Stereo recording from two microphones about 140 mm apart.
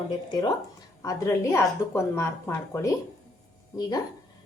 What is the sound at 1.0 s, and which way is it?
A woman's voice, 20° left (ahead or behind).